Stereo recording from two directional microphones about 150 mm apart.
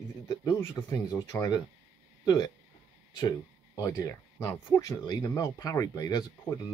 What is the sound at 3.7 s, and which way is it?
Speech, 20° left (ahead or behind).